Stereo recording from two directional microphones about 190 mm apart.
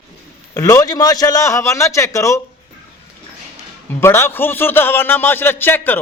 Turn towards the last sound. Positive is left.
turn(degrees=10)  # may be behind; listen again after turning